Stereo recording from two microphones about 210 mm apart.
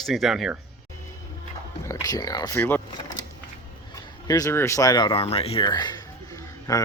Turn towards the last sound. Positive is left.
turn(degrees=15)  # may be behind; listen again after turning